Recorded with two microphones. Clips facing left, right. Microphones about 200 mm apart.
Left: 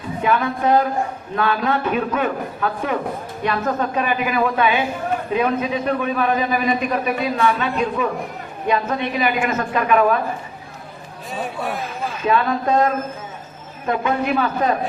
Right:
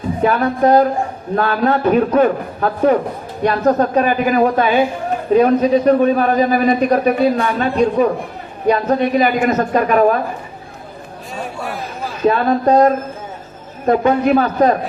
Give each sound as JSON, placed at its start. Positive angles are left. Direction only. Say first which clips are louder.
{"t": 0.2, "sound": "a man's voice", "louder": "right 5 dB", "side_deg": -40}
{"t": 11.3, "sound": "a sound", "louder": "even", "side_deg": 0}
{"t": 12.2, "sound": "a man's voice", "louder": "right 6 dB", "side_deg": -40}